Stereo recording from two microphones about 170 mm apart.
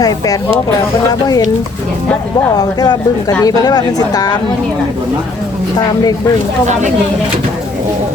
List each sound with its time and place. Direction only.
2.6 s speech: 20° left (ahead or behind)
5.7 s speech: 25° left (ahead or behind)